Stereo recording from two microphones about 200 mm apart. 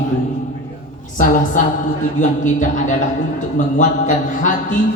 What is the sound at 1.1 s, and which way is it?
A woman's voice, 40° left (ahead or behind).